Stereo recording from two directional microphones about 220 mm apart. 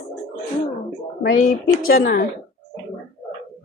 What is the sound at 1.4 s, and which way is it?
Speech, 40° left (ahead or behind).